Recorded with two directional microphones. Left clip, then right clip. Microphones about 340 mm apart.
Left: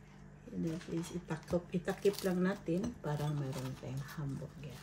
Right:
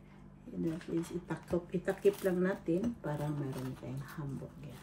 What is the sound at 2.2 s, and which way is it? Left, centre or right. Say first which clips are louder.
Speech: right 3 dB; centre.